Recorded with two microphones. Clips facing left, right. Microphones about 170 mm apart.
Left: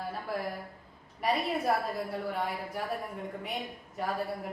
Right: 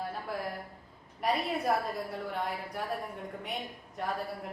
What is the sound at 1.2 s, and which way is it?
A woman's voice, centre (ahead or behind).